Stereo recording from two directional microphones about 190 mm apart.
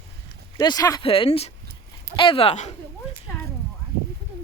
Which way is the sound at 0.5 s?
20° left (ahead or behind).